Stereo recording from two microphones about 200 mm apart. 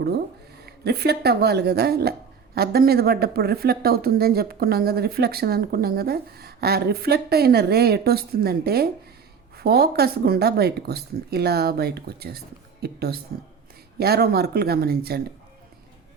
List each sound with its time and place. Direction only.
0.6 s speech: 55° right (ahead or behind)